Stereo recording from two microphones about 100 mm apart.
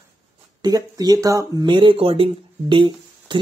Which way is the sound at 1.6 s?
55° right (ahead or behind).